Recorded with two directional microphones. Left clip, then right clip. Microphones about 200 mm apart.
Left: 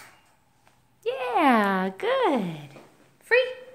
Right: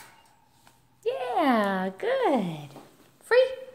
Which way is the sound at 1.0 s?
15° left (ahead or behind).